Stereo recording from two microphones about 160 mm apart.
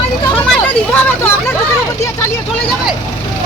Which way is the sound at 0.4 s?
5° left (ahead or behind).